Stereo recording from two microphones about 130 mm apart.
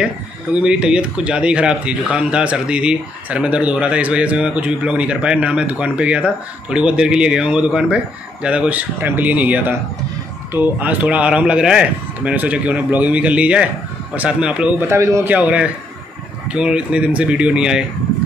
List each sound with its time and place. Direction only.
0.6 s speech: 5° right (ahead or behind)
14.9 s a man's voice: 20° right (ahead or behind)
15.3 s speech: 10° right (ahead or behind)